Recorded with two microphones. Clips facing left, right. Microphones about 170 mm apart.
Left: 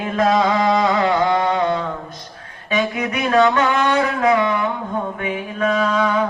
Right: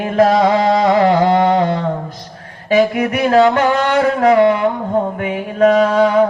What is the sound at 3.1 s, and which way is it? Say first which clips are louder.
Music: right 4 dB; 35° right (ahead or behind).